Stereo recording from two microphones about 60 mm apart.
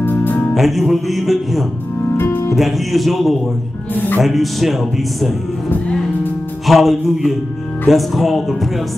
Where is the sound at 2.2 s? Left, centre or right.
Left.